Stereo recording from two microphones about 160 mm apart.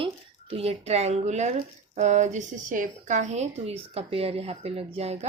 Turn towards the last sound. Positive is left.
turn(degrees=-40)  # may be behind; listen again after turning